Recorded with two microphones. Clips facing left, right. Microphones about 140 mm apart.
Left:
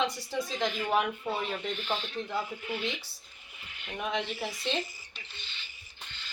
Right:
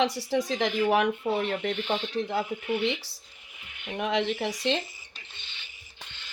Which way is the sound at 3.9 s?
75° right (ahead or behind).